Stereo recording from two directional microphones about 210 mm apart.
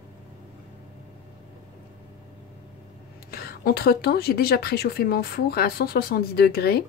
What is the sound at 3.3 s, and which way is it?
Speech, 45° left (ahead or behind).